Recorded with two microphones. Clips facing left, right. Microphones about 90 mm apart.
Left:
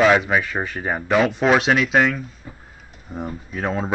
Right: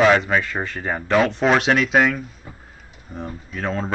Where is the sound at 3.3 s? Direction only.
10° left (ahead or behind).